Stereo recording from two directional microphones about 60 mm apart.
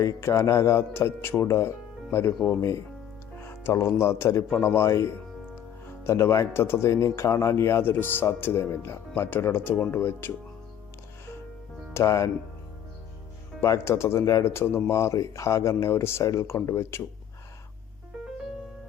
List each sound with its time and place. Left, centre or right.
0.0 s speech: left
7.9 s speech: left
11.9 s speech: left
13.7 s speech: left
14.8 s speech: left
16.2 s speech: left
16.6 s speech: left